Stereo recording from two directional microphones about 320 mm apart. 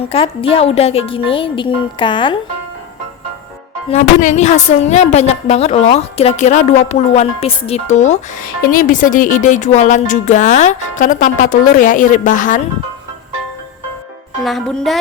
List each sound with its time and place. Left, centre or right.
0.0 s a woman's voice: centre
3.8 s speech: left
14.4 s music: centre